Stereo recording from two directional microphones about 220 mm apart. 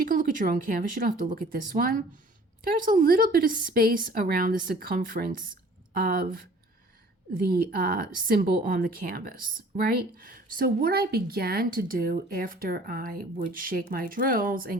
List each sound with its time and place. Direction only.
0.0 s speech: 40° right (ahead or behind)